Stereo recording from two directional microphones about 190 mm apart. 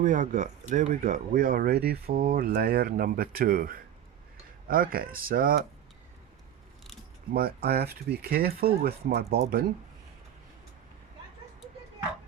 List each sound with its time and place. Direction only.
0.0 s speech: 40° right (ahead or behind)
7.3 s speech: 55° right (ahead or behind)